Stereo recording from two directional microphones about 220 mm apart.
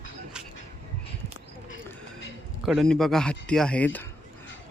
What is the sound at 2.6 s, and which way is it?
Speech, centre (ahead or behind).